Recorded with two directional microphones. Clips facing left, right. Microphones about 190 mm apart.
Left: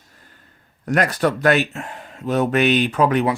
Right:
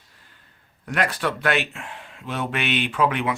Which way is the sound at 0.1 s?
45° left (ahead or behind).